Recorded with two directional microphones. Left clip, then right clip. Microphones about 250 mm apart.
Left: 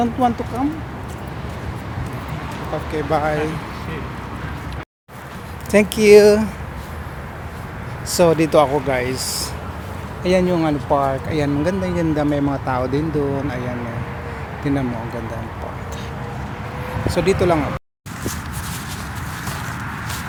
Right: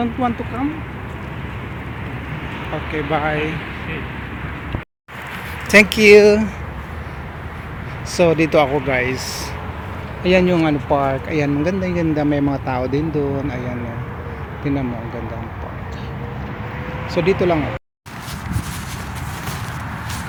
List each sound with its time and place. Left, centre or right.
0.0 s speech: centre
2.9 s speech: centre
5.7 s speech: centre
8.1 s speech: centre
17.1 s speech: centre